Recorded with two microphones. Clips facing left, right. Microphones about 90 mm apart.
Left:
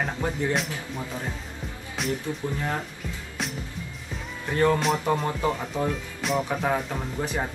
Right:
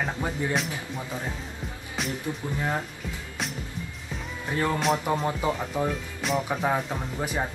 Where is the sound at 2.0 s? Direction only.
Centre (ahead or behind).